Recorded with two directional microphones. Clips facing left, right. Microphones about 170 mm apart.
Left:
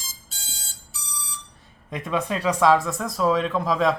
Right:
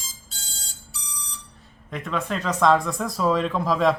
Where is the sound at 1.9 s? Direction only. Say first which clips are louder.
Left 2 dB; 15° left (ahead or behind).